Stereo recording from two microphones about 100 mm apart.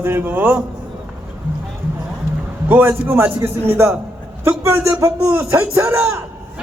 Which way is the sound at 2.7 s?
20° right (ahead or behind).